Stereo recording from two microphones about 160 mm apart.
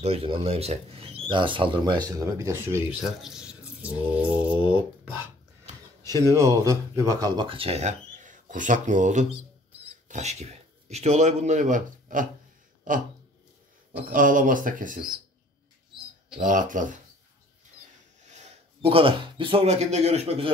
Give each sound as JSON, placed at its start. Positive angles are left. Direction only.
{"t": 0.0, "sound": "speech", "side_deg": -35}
{"t": 3.2, "sound": "speech", "side_deg": -5}
{"t": 14.1, "sound": "speech", "side_deg": -55}
{"t": 16.3, "sound": "speech", "side_deg": -55}
{"t": 18.4, "sound": "speech", "side_deg": -35}